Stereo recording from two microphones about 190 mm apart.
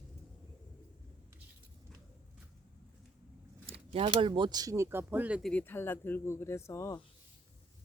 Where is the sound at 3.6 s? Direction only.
30° right (ahead or behind); by 5.5 s 5° right (ahead or behind).